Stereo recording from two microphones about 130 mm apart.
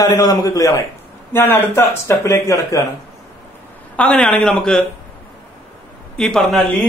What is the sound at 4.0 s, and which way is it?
Speech, 5° left (ahead or behind).